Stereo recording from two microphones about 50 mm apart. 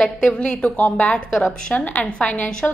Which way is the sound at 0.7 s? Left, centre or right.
Left.